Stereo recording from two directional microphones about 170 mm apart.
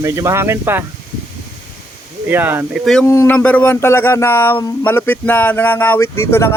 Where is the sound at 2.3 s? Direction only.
10° right (ahead or behind).